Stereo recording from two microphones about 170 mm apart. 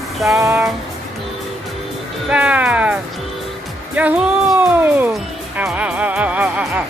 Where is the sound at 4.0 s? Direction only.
10° right (ahead or behind).